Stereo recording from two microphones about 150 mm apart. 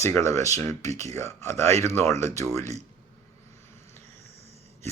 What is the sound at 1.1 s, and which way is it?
Speech, 20° left (ahead or behind).